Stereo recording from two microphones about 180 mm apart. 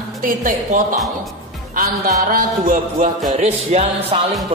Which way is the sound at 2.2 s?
50° right (ahead or behind).